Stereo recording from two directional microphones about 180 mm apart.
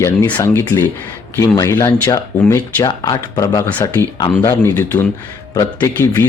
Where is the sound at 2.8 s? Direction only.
20° left (ahead or behind).